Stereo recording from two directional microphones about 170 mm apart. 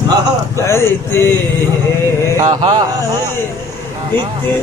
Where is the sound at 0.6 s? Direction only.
15° left (ahead or behind).